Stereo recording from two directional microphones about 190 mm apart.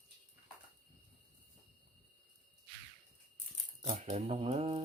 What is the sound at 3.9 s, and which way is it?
Speech, 40° right (ahead or behind).